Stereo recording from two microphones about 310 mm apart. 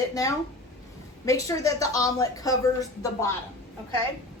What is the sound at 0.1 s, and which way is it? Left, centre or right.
A woman's voice, centre.